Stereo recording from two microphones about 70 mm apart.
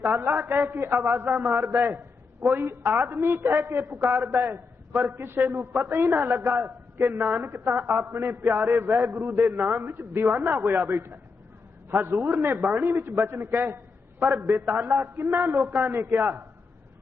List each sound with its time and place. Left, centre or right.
0.0 s a man's voice: right